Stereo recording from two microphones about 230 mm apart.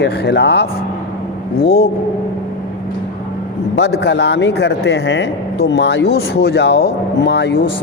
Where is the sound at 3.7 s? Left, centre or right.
Left.